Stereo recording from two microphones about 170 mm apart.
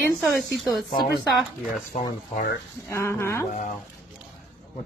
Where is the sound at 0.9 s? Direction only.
65° left (ahead or behind).